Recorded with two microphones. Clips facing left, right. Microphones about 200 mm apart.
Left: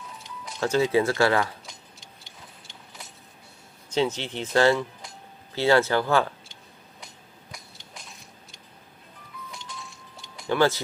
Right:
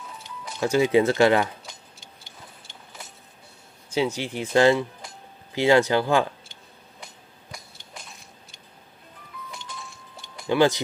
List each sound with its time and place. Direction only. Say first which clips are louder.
0.6 s speech: right 3 dB; 15° right (ahead or behind)
1.7 s tick-tock: right 1 dB; centre (ahead or behind)
3.9 s speech: even; 10° right (ahead or behind)
7.5 s a sound: right 3 dB; centre (ahead or behind)
9.6 s music: right 1 dB; centre (ahead or behind)
10.5 s speech: right 2 dB; 15° right (ahead or behind)